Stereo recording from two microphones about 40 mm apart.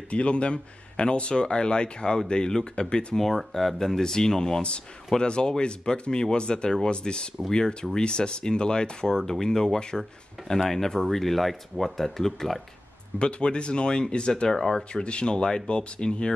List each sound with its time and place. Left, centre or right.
0.1 s speech: left
3.2 s speech: centre
9.8 s speech: centre
10.6 s speech: centre
13.2 s speech: left
14.5 s speech: centre
15.0 s speech: left